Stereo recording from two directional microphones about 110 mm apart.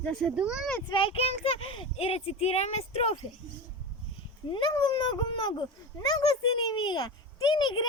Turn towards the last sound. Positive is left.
turn(degrees=45)  # may be behind; listen again after turning